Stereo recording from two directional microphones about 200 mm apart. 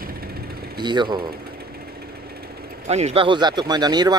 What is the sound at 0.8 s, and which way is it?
Speech, 20° right (ahead or behind).